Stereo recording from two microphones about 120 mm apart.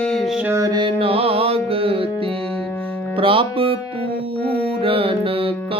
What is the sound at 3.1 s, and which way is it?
Music, 45° right (ahead or behind).